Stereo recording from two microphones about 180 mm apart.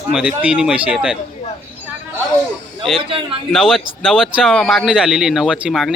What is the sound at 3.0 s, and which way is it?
Speech, 30° right (ahead or behind).